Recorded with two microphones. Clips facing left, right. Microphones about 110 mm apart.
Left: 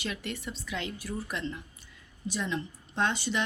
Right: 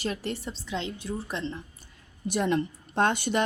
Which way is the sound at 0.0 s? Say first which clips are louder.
Right 4 dB; 35° right (ahead or behind).